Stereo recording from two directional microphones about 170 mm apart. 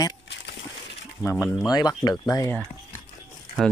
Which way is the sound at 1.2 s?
15° left (ahead or behind).